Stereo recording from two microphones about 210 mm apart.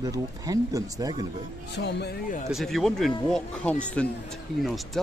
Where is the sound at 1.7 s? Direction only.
55° left (ahead or behind).